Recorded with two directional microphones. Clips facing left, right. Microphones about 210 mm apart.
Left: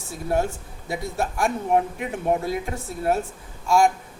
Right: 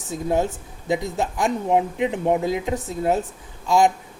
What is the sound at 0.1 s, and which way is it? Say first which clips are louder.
A man's voice: right 2 dB; 20° right (ahead or behind).